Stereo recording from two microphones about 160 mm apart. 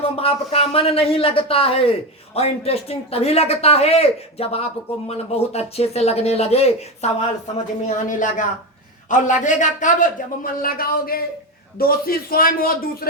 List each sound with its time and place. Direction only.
0.0 s speech: 35° left (ahead or behind)
7.9 s a man's voice: 55° left (ahead or behind)